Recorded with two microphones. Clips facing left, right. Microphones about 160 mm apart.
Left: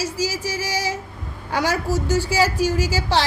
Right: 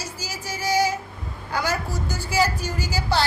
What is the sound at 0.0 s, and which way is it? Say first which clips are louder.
Music: left 10 dB; 90° left.